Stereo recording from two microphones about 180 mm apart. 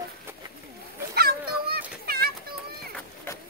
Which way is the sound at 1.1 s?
60° right (ahead or behind).